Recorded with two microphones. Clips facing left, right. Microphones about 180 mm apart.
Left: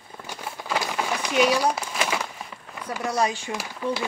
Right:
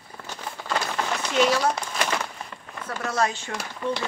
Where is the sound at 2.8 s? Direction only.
15° left (ahead or behind).